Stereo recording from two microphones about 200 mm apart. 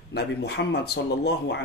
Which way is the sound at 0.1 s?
55° left (ahead or behind).